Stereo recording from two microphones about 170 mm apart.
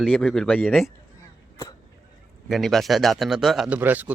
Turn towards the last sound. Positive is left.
turn(degrees=-10)  # may be behind; listen again after turning